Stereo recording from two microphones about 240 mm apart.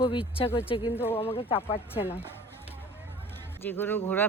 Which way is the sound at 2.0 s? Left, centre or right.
Centre.